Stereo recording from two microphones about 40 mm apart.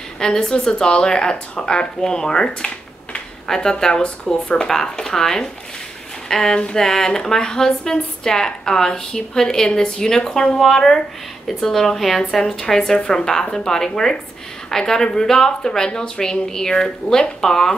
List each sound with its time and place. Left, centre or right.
0.2 s a woman's voice: centre